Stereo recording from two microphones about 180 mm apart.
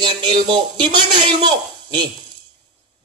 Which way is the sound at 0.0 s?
25° right (ahead or behind).